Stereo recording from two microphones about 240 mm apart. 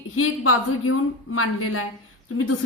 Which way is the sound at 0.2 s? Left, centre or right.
Left.